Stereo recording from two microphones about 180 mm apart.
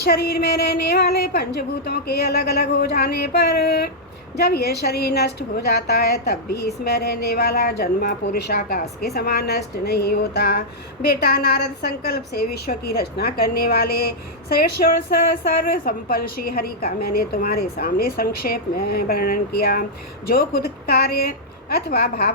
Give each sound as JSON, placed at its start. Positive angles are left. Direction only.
{"t": 0.0, "sound": "a woman's voice", "side_deg": 65}